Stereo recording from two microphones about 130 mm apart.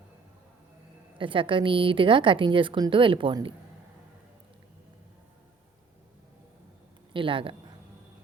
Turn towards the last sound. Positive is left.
turn(degrees=-40)  # may be behind; listen again after turning